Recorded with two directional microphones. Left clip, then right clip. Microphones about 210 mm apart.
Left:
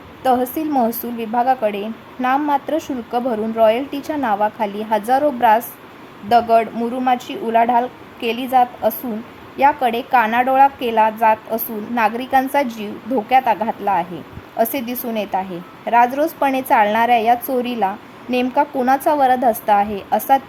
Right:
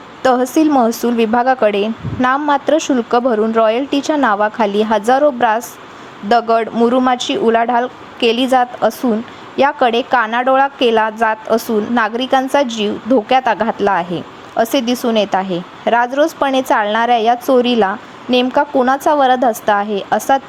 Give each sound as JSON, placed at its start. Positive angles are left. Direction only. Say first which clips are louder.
{"t": 0.2, "sound": "a woman's voice", "louder": "right 5 dB", "side_deg": -15}